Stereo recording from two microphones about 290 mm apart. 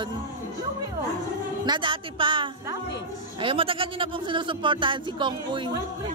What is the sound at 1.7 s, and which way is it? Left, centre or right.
Speech, centre.